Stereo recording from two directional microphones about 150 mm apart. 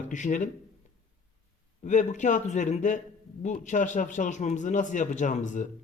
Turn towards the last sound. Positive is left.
turn(degrees=55)  # may be behind; listen again after turning